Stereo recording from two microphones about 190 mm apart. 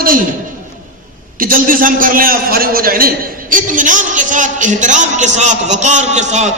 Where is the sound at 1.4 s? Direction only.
45° right (ahead or behind).